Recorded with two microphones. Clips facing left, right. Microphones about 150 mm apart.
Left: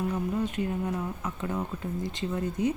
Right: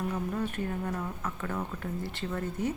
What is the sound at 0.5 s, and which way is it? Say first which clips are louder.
Speech: left 3 dB; 15° left (ahead or behind).